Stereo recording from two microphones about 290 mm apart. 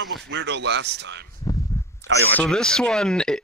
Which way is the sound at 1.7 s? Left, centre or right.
Centre.